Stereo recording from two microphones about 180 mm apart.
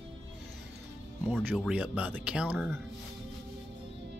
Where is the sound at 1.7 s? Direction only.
5° right (ahead or behind).